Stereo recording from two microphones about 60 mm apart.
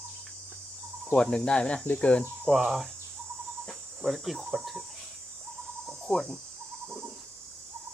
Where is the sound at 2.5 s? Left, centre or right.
Centre.